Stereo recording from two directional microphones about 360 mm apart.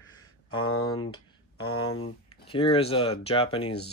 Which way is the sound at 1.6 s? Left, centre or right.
Left.